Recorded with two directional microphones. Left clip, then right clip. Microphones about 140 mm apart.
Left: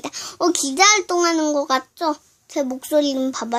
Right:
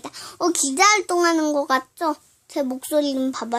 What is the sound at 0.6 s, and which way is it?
A child's voice, centre (ahead or behind).